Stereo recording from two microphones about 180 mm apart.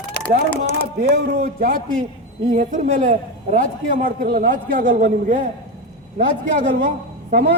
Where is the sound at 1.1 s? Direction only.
60° right (ahead or behind).